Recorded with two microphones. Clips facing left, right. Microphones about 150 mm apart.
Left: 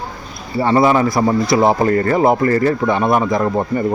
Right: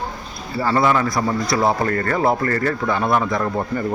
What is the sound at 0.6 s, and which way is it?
Speech, 25° left (ahead or behind).